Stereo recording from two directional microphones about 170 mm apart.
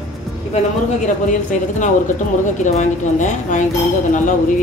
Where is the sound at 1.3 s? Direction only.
45° left (ahead or behind).